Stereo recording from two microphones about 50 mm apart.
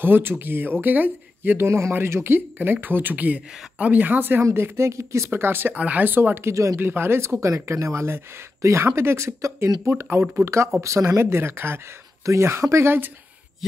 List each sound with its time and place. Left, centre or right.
0.0 s speech: right
2.0 s speech: right
4.6 s speech: right
5.3 s speech: right
5.8 s speech: right
7.2 s speech: right
10.8 s speech: right
11.2 s speech: right
12.3 s speech: right